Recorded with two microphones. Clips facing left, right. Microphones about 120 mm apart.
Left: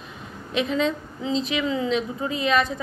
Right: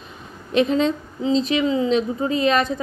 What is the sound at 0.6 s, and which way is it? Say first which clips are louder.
Speech: right 5 dB; 35° right (ahead or behind).